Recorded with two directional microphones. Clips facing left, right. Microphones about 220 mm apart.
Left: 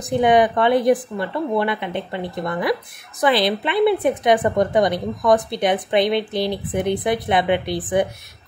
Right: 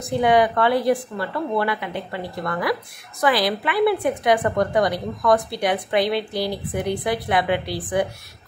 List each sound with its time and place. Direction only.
0.1 s a woman's voice: 20° left (ahead or behind)